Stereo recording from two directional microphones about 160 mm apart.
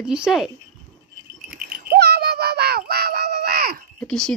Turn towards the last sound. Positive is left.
turn(degrees=5)  # may be behind; listen again after turning